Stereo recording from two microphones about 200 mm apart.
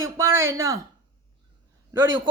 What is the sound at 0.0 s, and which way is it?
Speech, 15° right (ahead or behind).